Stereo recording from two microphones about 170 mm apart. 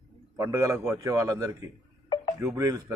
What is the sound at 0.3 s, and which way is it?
A man's voice, 20° right (ahead or behind).